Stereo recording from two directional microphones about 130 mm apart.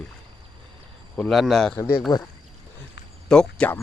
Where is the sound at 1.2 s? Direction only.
Centre (ahead or behind).